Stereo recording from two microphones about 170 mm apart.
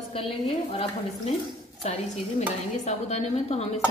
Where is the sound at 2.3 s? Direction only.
40° left (ahead or behind).